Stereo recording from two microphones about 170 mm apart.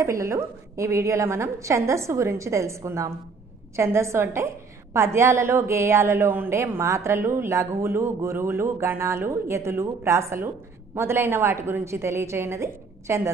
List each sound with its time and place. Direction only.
0.0 s a woman's voice: 20° right (ahead or behind)